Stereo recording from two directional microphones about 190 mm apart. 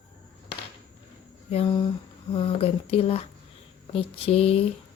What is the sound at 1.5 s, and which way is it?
Speech, 30° left (ahead or behind).